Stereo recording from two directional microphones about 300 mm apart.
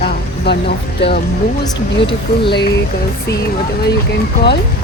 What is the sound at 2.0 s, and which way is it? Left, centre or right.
Speech, centre.